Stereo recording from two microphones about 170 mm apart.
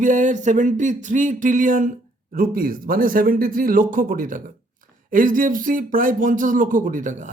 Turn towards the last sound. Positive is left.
turn(degrees=-50)  # may be behind; listen again after turning